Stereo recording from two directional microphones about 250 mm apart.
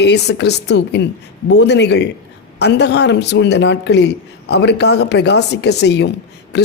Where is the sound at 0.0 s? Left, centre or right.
Left.